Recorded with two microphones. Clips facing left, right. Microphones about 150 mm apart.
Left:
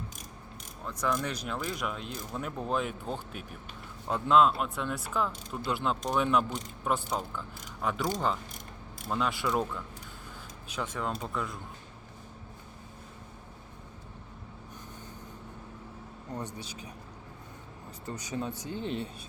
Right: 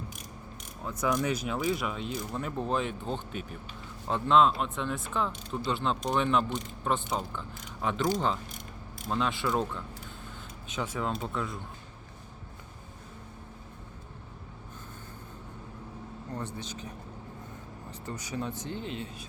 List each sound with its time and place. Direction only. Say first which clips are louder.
1.0 s speech: right 3 dB; 10° right (ahead or behind)
9.0 s speech: right 1 dB; 5° left (ahead or behind)
16.3 s speech: even; 15° left (ahead or behind)
18.0 s speech: even; 20° left (ahead or behind)